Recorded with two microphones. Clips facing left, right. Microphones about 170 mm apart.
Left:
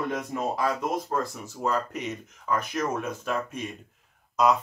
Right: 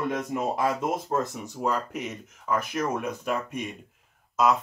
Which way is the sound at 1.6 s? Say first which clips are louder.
Even; 5° right (ahead or behind).